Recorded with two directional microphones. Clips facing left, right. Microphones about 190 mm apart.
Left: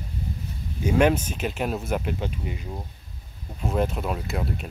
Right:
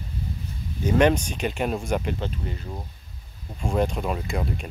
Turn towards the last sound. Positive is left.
turn(degrees=5)  # may be behind; listen again after turning